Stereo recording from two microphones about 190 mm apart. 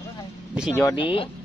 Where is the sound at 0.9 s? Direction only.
30° left (ahead or behind).